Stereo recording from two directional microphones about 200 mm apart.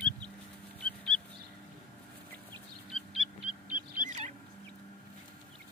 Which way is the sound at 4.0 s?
35° right (ahead or behind).